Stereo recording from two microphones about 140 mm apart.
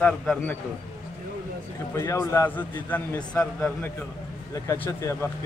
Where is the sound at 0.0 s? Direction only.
10° left (ahead or behind).